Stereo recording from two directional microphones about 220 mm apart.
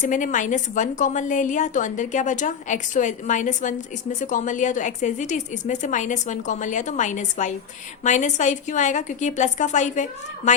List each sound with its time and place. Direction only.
0.0 s a woman's voice: 35° left (ahead or behind)